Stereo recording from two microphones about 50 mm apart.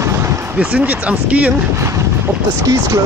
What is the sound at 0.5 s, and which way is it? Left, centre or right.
Speech, right.